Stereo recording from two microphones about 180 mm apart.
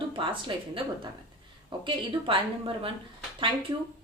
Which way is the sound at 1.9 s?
30° right (ahead or behind).